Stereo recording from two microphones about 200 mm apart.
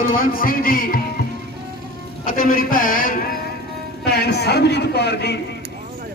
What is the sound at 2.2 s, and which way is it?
A man's voice, 45° left (ahead or behind).